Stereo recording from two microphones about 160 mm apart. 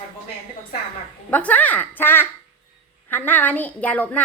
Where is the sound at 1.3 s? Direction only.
10° left (ahead or behind).